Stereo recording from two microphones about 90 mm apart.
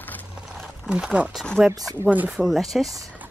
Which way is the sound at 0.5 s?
Centre (ahead or behind).